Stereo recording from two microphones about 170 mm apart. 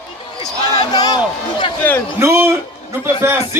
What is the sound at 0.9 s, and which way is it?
Speech, 25° left (ahead or behind).